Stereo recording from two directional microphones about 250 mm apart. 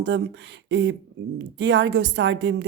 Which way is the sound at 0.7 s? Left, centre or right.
Right.